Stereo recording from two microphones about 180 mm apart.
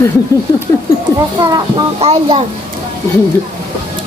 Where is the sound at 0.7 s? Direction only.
15° left (ahead or behind).